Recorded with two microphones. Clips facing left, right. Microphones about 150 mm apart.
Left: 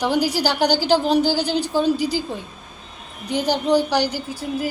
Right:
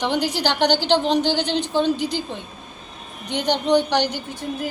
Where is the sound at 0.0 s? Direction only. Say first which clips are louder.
Left 2 dB; 10° left (ahead or behind).